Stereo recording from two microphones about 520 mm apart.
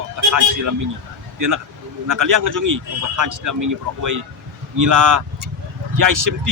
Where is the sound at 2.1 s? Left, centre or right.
Right.